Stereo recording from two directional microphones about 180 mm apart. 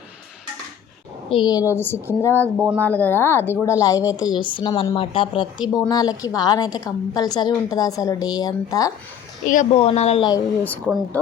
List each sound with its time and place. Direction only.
1.3 s a woman's voice: 25° left (ahead or behind)
1.7 s a woman's voice: 10° left (ahead or behind)
9.5 s speech: 40° left (ahead or behind)
10.8 s speech: centre (ahead or behind)